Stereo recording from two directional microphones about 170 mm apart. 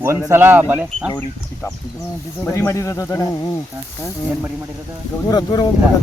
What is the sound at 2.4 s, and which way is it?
Speech, 15° left (ahead or behind).